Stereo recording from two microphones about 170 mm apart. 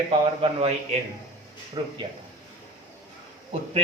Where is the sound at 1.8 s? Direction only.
30° right (ahead or behind).